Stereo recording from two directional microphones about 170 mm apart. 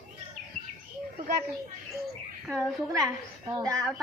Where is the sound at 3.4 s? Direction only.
20° right (ahead or behind).